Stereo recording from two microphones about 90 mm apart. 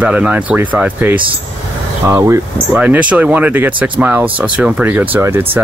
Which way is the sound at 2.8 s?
15° right (ahead or behind).